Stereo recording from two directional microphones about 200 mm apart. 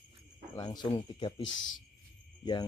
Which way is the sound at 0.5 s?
20° left (ahead or behind).